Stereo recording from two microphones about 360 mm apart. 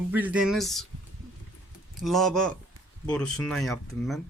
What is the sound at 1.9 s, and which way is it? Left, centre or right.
Speech, centre.